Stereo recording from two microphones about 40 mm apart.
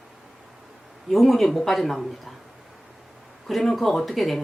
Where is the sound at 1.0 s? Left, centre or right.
Centre.